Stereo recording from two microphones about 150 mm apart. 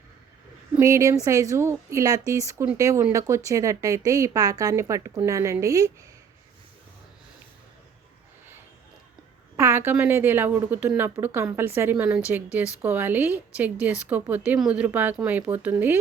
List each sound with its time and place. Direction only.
0.8 s speech: 20° right (ahead or behind)
9.6 s a woman's voice: 15° right (ahead or behind)